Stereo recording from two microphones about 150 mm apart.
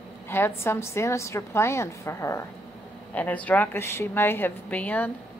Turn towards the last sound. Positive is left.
turn(degrees=10)  # may be behind; listen again after turning